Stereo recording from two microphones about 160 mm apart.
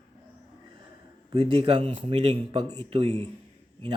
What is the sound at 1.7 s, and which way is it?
Speech, 35° right (ahead or behind).